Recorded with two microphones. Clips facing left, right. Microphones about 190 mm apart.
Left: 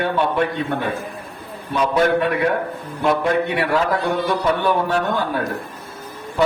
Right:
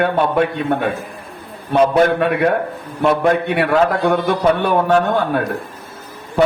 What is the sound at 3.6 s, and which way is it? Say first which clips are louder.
Speech: right 4 dB; 60° right (ahead or behind).